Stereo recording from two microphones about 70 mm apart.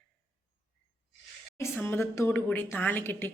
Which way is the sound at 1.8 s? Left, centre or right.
Left.